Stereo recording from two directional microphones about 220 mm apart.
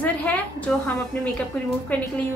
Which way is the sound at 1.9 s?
5° left (ahead or behind).